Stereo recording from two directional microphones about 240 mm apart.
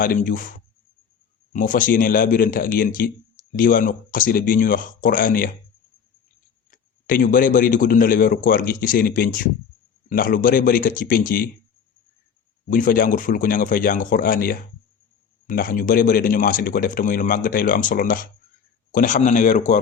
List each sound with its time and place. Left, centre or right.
0.0 s speech: left
1.5 s speech: left
6.7 s speech: left
12.7 s speech: left